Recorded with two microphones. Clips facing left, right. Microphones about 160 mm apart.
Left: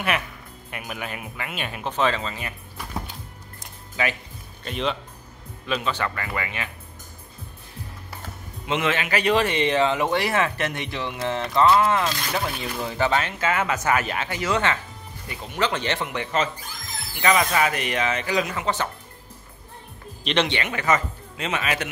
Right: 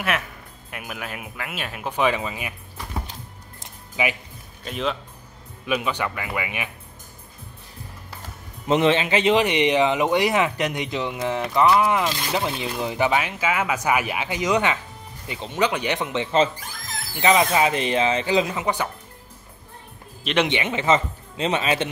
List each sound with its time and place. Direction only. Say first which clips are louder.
0.7 s speech: left 1 dB; centre (ahead or behind)
3.5 s a sound: right 1 dB; 15° right (ahead or behind)
4.6 s speech: even; centre (ahead or behind)
5.7 s speech: right 1 dB; 15° right (ahead or behind)
8.6 s speech: right 6 dB; 35° right (ahead or behind); by 18.9 s 15° right (ahead or behind)
20.4 s speech: right 2 dB; 20° right (ahead or behind)